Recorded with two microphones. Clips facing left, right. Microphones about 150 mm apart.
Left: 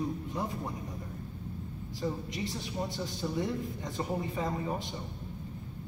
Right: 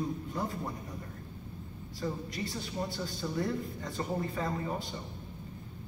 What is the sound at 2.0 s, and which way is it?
A man's voice, 20° left (ahead or behind).